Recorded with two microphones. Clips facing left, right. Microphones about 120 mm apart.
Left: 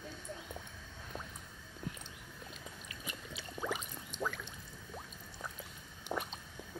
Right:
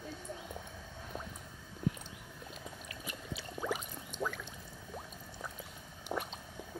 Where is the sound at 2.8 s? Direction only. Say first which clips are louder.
Right 3 dB; 5° right (ahead or behind).